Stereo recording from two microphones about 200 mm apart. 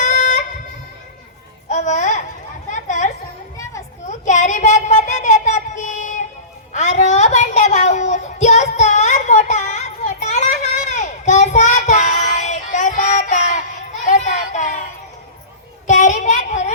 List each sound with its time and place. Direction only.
0.0 s music: 40° left (ahead or behind)
1.7 s babbling: 35° left (ahead or behind)
2.7 s children playing: 35° left (ahead or behind)
4.1 s a sound: 35° left (ahead or behind)
6.7 s child singing: 35° left (ahead or behind)
15.9 s child singing: 35° left (ahead or behind)